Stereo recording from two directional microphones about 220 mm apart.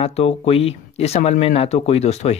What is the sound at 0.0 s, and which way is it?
Speech, 25° left (ahead or behind).